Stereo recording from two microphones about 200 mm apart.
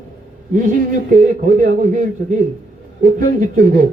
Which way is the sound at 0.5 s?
45° right (ahead or behind).